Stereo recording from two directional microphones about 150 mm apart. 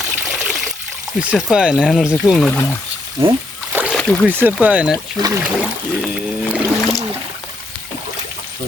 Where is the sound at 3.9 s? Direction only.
5° left (ahead or behind).